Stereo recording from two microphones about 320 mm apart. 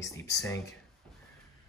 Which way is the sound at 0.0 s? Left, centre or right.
Centre.